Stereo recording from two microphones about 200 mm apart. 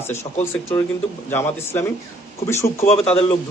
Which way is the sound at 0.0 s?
10° left (ahead or behind).